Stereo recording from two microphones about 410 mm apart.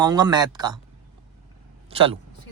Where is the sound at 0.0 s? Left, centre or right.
Centre.